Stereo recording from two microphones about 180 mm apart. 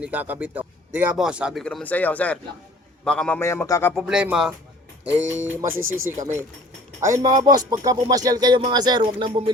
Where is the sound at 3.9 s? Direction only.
5° right (ahead or behind).